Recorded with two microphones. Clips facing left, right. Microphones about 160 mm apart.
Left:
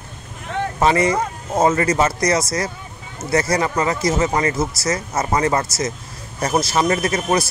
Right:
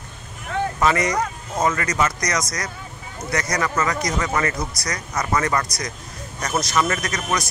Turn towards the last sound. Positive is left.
turn(degrees=30)  # may be behind; listen again after turning